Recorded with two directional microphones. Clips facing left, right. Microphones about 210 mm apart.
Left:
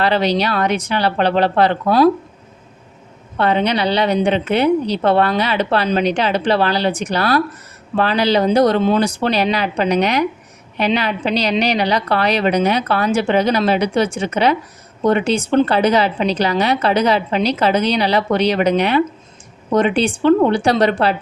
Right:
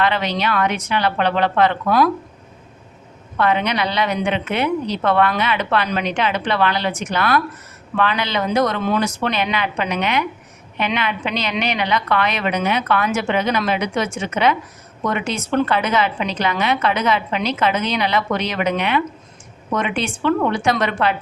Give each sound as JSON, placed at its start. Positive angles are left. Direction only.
{"t": 0.0, "sound": "a woman's voice", "side_deg": 35}
{"t": 3.3, "sound": "a woman's voice", "side_deg": 30}